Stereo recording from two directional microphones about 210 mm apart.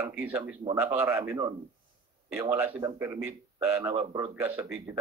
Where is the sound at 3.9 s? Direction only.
20° right (ahead or behind).